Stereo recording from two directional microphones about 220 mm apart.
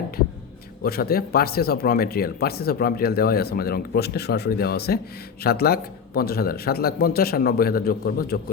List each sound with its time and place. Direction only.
0.8 s speech: 45° left (ahead or behind)